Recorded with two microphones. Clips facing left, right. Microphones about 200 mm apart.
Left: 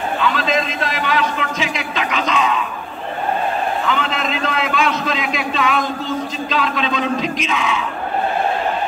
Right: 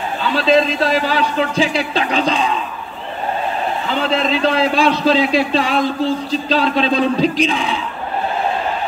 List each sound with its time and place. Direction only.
0.2 s a man's voice: 30° right (ahead or behind)
3.8 s a man's voice: 35° right (ahead or behind)